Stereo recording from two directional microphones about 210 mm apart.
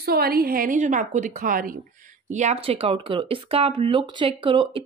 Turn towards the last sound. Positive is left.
turn(degrees=-25)  # may be behind; listen again after turning